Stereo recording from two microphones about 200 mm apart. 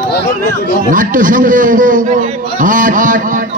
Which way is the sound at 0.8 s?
40° right (ahead or behind).